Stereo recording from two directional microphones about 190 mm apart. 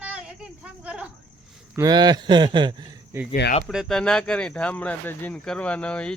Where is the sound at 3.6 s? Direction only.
5° left (ahead or behind).